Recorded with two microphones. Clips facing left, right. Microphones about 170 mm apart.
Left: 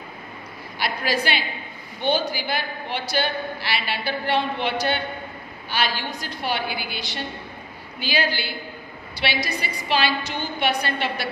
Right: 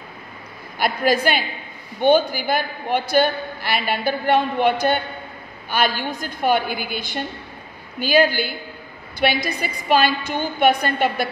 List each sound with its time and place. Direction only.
0.7 s a woman's voice: 50° right (ahead or behind)